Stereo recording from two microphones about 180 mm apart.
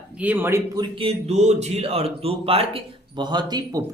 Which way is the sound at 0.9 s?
30° right (ahead or behind).